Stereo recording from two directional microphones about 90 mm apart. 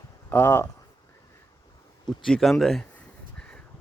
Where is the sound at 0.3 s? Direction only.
20° left (ahead or behind).